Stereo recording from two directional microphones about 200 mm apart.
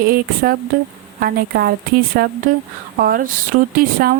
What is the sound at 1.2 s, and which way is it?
A woman's voice, 50° right (ahead or behind).